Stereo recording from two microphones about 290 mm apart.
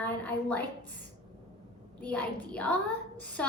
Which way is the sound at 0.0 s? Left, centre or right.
Centre.